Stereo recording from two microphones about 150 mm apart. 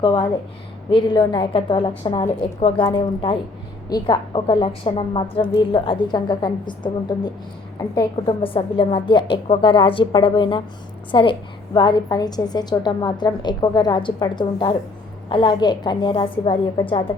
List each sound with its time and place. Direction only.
0.0 s a woman's voice: 30° left (ahead or behind)